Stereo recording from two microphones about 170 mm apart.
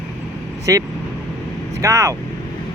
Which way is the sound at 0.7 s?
20° right (ahead or behind).